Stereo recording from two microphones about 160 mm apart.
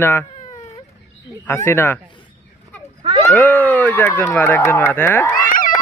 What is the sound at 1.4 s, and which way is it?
Speech, 15° left (ahead or behind).